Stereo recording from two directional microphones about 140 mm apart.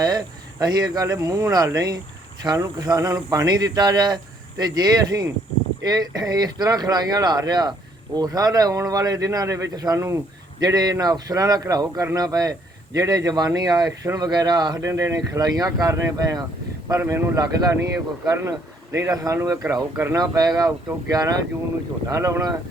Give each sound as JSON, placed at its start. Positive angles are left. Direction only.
{"t": 0.6, "sound": "speech", "side_deg": -25}